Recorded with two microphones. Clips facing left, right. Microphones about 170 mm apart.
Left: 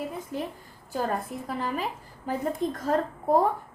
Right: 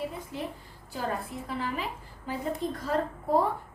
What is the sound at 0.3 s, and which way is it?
A woman's voice, 45° left (ahead or behind).